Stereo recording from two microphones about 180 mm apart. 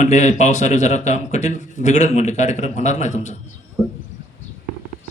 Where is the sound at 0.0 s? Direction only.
40° left (ahead or behind).